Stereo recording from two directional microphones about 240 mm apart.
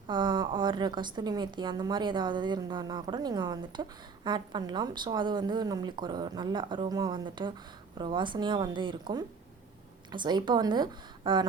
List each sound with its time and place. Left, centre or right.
0.1 s a woman's voice: centre